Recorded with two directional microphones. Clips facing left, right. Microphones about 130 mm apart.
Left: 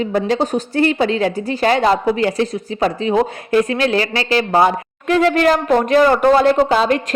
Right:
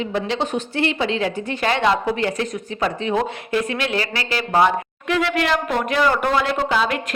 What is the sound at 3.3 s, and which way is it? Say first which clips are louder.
A woman's voice: left 6 dB; 40° left (ahead or behind).